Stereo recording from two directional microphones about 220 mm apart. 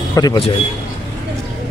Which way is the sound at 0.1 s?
20° left (ahead or behind).